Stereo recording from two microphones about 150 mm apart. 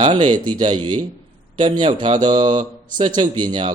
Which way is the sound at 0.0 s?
30° right (ahead or behind).